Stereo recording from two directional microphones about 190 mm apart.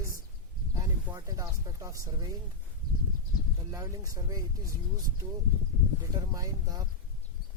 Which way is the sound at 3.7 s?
15° right (ahead or behind).